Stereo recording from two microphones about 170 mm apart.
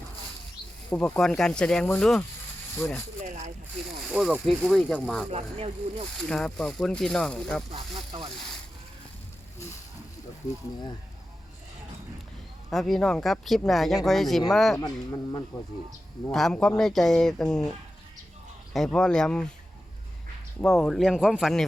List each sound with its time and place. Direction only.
0.9 s speech: 10° left (ahead or behind)
3.2 s speech: 45° right (ahead or behind)
4.1 s speech: 5° right (ahead or behind)
5.3 s speech: 35° right (ahead or behind)
6.2 s speech: 5° left (ahead or behind)
7.7 s speech: 30° right (ahead or behind)
12.7 s speech: centre (ahead or behind)
14.8 s speech: 25° left (ahead or behind)
16.3 s speech: centre (ahead or behind)
18.7 s speech: 5° left (ahead or behind)
20.6 s speech: 5° left (ahead or behind)